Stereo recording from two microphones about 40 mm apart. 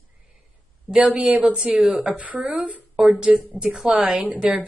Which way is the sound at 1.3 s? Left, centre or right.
Right.